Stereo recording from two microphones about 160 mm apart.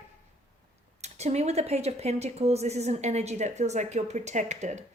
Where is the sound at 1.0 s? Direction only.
45° right (ahead or behind).